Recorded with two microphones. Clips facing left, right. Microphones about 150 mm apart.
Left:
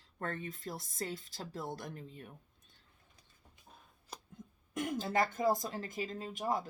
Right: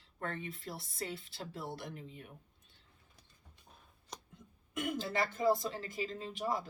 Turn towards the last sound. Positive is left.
turn(degrees=45)  # may be behind; listen again after turning